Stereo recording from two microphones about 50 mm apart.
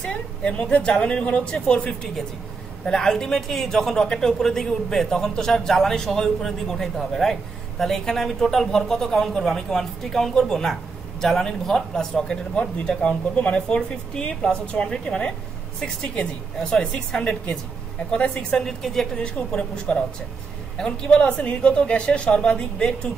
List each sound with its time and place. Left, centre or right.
0.0 s a woman's voice: left
16.5 s speech: centre
16.9 s a man's voice: left
18.8 s speech: centre
19.2 s a man's voice: centre